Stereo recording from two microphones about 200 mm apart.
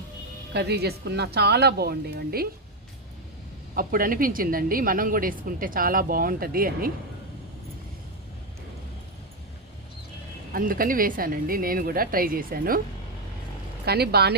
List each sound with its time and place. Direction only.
0.5 s a woman's voice: 55° right (ahead or behind)
3.8 s a woman's voice: 45° right (ahead or behind)
10.5 s a woman's voice: 45° right (ahead or behind)
13.8 s a woman's voice: 55° right (ahead or behind)